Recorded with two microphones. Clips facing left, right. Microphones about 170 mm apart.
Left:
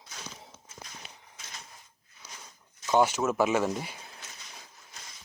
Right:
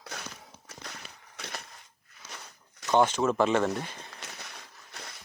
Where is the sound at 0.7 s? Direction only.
70° right (ahead or behind).